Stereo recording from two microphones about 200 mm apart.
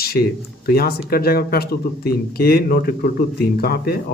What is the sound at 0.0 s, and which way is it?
Speech, 50° left (ahead or behind).